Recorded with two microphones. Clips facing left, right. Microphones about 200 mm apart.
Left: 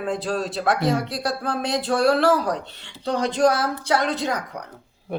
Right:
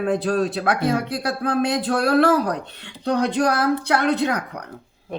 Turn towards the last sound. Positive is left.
turn(degrees=-60)  # may be behind; listen again after turning